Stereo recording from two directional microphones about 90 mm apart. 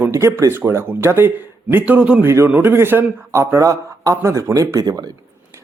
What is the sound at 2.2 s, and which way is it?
Speech, 25° right (ahead or behind).